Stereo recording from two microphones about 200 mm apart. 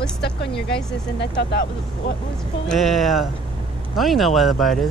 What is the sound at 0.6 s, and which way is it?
Speech, 5° left (ahead or behind).